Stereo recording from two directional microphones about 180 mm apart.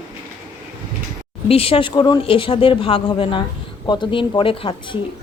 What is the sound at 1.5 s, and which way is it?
Speech, 30° left (ahead or behind).